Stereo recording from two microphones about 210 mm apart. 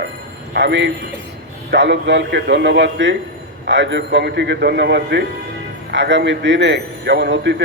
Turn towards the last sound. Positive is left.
turn(degrees=-55)  # may be behind; listen again after turning